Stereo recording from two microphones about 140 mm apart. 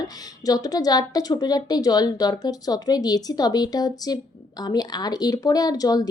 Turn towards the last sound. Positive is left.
turn(degrees=25)  # may be behind; listen again after turning